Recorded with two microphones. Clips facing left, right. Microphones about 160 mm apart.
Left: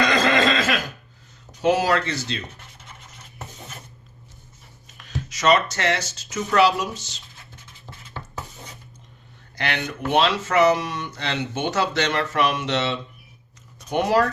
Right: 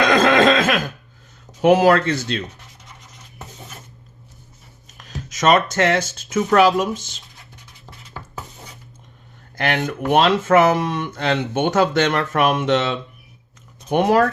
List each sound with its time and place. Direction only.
0.0 s a sound: 50° right (ahead or behind)
1.6 s speech: 55° right (ahead or behind)
4.9 s speech: 45° right (ahead or behind)
9.6 s speech: 50° right (ahead or behind)